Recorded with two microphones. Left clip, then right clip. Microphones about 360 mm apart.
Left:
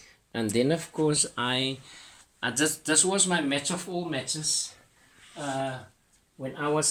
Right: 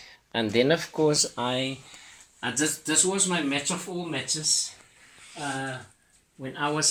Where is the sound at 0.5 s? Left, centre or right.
Centre.